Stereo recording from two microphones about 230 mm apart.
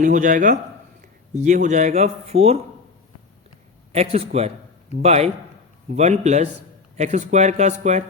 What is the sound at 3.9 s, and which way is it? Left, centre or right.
A man's voice, right.